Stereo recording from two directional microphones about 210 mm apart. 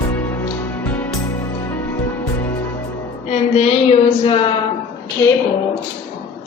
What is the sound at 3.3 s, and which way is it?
A woman's voice, 30° left (ahead or behind).